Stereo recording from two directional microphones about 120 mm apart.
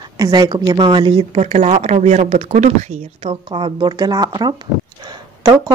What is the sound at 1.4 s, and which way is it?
Speech, 70° right (ahead or behind).